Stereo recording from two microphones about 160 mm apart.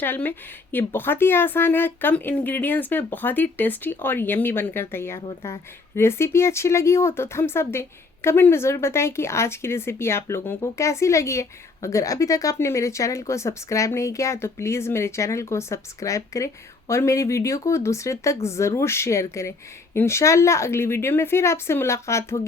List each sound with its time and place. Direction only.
0.0 s speech: 10° left (ahead or behind)